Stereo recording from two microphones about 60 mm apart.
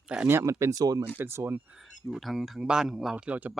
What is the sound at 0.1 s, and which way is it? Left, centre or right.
Speech, centre.